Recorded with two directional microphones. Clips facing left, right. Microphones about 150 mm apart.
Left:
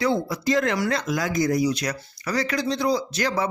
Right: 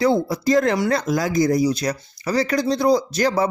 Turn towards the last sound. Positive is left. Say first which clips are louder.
# right 5 dB
turn(degrees=-35)  # may be behind; listen again after turning